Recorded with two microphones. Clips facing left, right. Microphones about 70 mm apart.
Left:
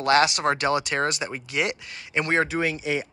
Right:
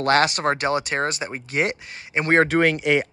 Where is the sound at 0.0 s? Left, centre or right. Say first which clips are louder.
Right 1 dB; right.